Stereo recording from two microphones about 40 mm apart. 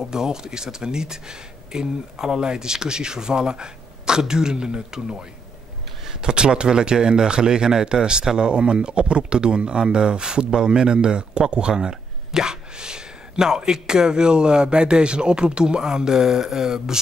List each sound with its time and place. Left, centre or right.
0.0 s speech: centre
6.0 s speech: centre